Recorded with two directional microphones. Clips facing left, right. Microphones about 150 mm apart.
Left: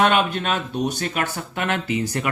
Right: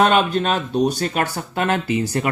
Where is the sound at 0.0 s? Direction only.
35° right (ahead or behind).